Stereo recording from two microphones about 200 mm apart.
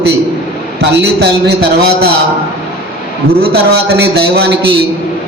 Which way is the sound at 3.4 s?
55° right (ahead or behind).